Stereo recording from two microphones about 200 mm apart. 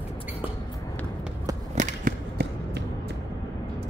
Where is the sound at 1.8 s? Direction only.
40° right (ahead or behind).